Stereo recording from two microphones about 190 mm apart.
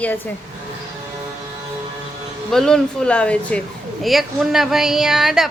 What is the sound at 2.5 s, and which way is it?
Speech, 5° left (ahead or behind).